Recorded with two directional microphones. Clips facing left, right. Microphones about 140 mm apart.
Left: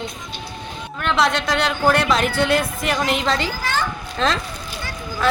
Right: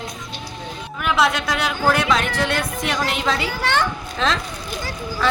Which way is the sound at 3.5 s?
70° right (ahead or behind).